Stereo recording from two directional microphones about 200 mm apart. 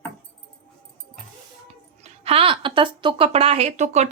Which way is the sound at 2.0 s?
30° right (ahead or behind).